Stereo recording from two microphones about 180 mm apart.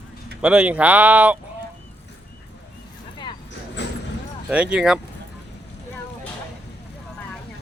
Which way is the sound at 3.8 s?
75° left (ahead or behind).